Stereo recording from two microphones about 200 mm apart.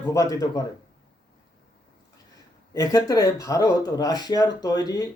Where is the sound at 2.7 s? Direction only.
20° left (ahead or behind).